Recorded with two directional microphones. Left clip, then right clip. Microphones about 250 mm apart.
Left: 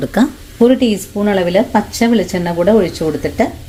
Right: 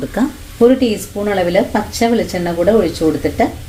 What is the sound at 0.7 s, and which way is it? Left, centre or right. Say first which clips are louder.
Speech: left 1 dB; left.